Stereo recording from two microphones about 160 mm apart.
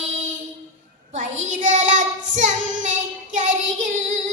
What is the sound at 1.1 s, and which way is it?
Child singing, 50° right (ahead or behind).